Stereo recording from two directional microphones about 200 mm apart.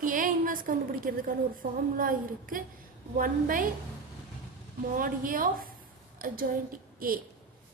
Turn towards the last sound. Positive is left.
turn(degrees=-45)  # may be behind; listen again after turning